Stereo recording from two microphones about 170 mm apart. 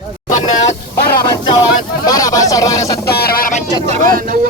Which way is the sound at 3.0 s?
65° left (ahead or behind).